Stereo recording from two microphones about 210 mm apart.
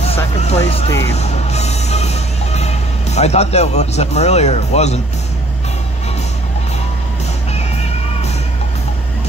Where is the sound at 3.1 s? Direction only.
30° left (ahead or behind).